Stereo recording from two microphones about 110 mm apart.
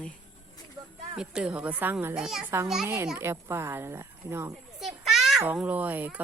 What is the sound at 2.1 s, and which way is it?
Speech, 5° right (ahead or behind).